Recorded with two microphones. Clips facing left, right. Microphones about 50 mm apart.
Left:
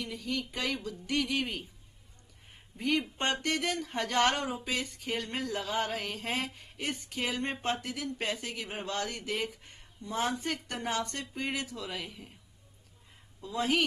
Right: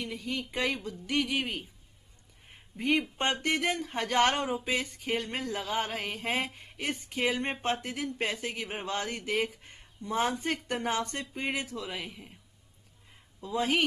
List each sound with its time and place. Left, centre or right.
0.0 s speech: right
2.8 s speech: centre
9.1 s speech: centre
11.7 s speech: centre
13.4 s speech: right